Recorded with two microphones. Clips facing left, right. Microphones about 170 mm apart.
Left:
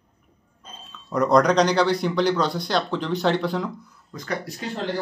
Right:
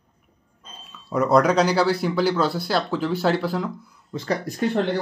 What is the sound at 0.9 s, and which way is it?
Speech, 5° right (ahead or behind).